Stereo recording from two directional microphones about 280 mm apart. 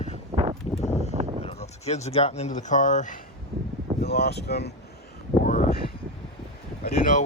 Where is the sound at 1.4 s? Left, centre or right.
Left.